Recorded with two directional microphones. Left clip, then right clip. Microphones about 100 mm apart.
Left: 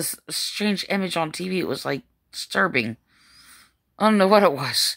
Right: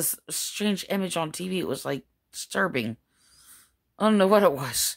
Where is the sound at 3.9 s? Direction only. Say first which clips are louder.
Left 3 dB; 40° right (ahead or behind).